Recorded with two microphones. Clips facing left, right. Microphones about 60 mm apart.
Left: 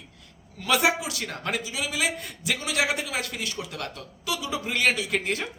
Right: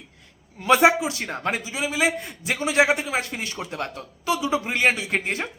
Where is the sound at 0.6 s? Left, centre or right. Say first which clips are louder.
Right 6 dB; right.